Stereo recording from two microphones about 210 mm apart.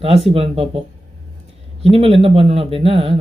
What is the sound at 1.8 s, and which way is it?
Speech, 25° right (ahead or behind).